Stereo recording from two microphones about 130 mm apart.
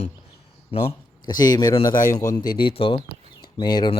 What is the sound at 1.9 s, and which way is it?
Speech, 90° left.